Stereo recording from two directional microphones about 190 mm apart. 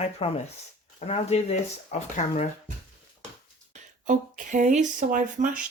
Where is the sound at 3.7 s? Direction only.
40° right (ahead or behind).